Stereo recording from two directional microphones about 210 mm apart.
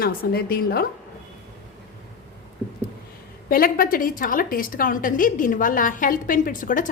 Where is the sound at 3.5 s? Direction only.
45° left (ahead or behind).